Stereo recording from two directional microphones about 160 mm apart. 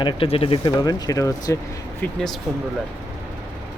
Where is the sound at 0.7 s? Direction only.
20° left (ahead or behind).